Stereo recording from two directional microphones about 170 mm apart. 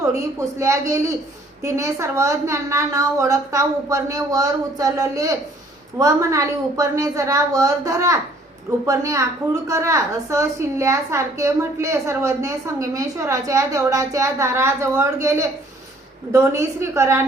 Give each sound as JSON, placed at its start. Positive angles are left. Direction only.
{"t": 0.0, "sound": "a woman's voice", "side_deg": -20}